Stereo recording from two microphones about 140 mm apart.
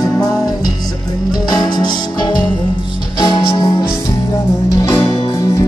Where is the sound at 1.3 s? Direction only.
30° left (ahead or behind).